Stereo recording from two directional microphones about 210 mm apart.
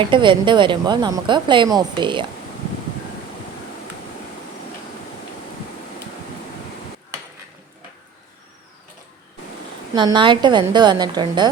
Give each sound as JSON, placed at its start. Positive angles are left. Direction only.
{"t": 0.0, "sound": "speech", "side_deg": -25}
{"t": 9.9, "sound": "speech", "side_deg": -20}